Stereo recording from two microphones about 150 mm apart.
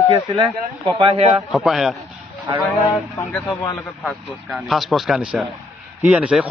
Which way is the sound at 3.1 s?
10° left (ahead or behind).